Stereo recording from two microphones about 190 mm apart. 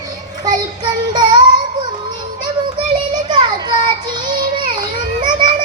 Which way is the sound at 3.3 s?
25° right (ahead or behind).